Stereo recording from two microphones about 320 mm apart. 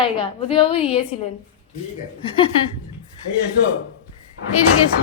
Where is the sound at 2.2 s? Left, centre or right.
Centre.